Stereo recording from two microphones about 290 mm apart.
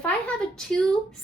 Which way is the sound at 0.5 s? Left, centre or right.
Centre.